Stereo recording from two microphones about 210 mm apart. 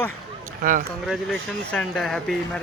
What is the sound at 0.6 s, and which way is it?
Speech, 40° right (ahead or behind).